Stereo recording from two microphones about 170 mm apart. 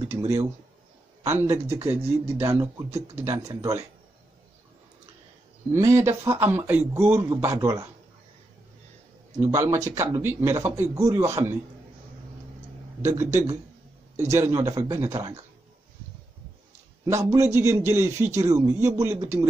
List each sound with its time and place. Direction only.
1.2 s a man's voice: 15° right (ahead or behind)
5.7 s a man's voice: 15° right (ahead or behind)
9.4 s a man's voice: 15° right (ahead or behind)
13.0 s a man's voice: 15° right (ahead or behind)
17.0 s a man's voice: 20° right (ahead or behind)